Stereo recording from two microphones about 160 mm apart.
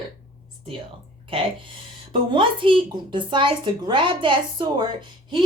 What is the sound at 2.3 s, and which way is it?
Speech, 30° right (ahead or behind).